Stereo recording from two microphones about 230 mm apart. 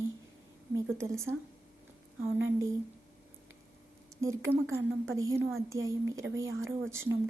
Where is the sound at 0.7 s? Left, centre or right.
Centre.